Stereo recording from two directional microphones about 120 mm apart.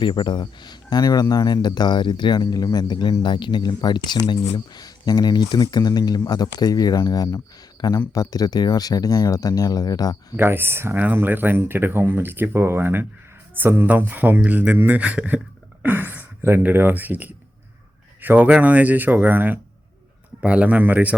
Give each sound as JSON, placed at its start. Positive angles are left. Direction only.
{"t": 0.0, "sound": "speech", "side_deg": 40}
{"t": 10.3, "sound": "speech", "side_deg": -20}